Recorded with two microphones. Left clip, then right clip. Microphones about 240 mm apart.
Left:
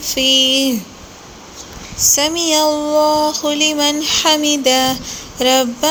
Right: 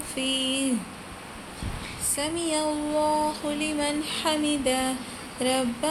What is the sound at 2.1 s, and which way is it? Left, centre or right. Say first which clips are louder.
Music: left 11 dB; left.